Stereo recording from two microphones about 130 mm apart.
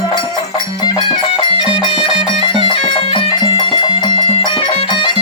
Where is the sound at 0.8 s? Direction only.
40° left (ahead or behind).